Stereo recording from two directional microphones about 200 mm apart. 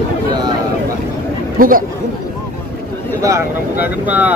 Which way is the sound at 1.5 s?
45° right (ahead or behind).